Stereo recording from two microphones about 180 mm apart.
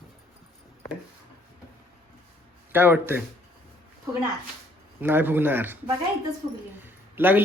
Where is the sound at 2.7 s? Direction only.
10° right (ahead or behind).